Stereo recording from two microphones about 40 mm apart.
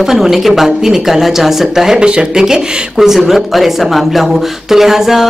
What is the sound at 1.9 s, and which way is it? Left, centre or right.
Speech, right.